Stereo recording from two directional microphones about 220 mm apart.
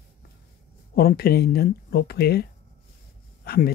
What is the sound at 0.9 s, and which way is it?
Speech, 45° left (ahead or behind).